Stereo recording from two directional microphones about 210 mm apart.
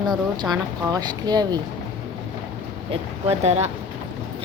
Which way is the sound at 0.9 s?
20° right (ahead or behind).